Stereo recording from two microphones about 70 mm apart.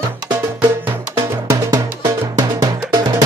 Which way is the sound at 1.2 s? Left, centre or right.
Right.